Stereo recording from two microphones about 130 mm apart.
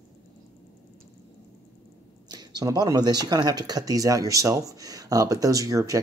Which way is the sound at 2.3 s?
30° right (ahead or behind).